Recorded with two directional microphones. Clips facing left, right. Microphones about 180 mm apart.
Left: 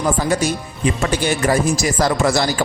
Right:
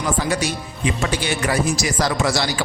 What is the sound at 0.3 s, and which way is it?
A man's voice, 45° left (ahead or behind).